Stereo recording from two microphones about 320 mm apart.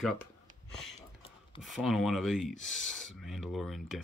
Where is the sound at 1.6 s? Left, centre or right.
Centre.